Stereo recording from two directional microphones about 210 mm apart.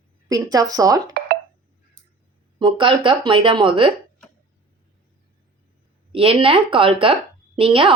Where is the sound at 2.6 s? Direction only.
20° right (ahead or behind).